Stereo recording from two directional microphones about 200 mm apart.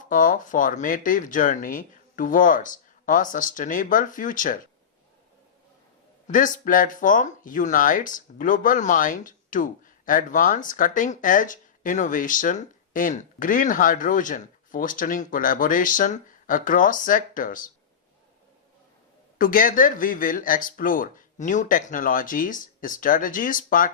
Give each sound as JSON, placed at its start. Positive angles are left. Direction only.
{"t": 0.0, "sound": "speech", "side_deg": 40}
{"t": 6.2, "sound": "speech", "side_deg": 40}
{"t": 19.4, "sound": "speech", "side_deg": 45}